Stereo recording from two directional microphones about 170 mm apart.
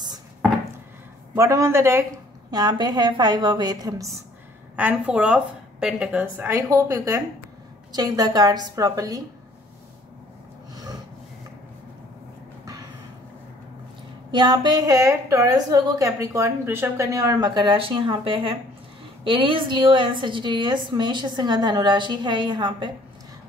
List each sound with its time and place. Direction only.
1.3 s a man's voice: 20° right (ahead or behind)
4.7 s a woman's voice: 10° right (ahead or behind)
6.5 s a woman's voice: 20° right (ahead or behind)
12.6 s a sound: 20° right (ahead or behind)
14.3 s a woman's voice: 25° right (ahead or behind)